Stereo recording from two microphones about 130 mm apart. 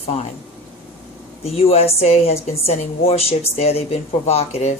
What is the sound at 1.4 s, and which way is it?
A woman's voice, 50° left (ahead or behind).